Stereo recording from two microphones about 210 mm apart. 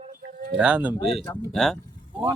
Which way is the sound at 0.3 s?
40° right (ahead or behind).